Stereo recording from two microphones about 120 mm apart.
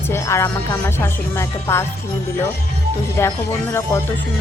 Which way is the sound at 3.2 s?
25° left (ahead or behind).